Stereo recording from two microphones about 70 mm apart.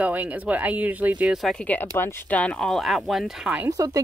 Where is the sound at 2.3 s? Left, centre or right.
Centre.